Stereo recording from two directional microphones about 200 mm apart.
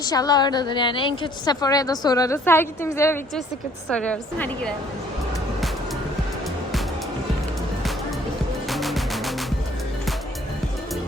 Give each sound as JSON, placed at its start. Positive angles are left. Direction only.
{"t": 0.0, "sound": "a woman's voice", "side_deg": 20}
{"t": 8.7, "sound": "music", "side_deg": 0}